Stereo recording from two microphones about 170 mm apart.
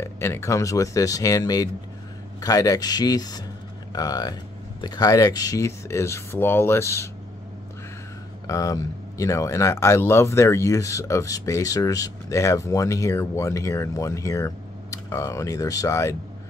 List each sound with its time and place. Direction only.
0.0 s speech: 15° left (ahead or behind)
8.5 s speech: 20° left (ahead or behind)